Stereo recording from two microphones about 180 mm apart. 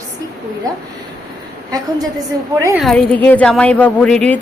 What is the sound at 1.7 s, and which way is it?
A woman's voice, 20° right (ahead or behind).